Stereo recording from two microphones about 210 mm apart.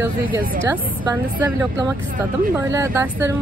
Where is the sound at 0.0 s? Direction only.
10° right (ahead or behind).